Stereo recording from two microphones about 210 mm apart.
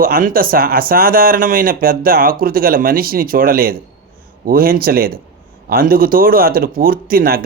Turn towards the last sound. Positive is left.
turn(degrees=-45)  # may be behind; listen again after turning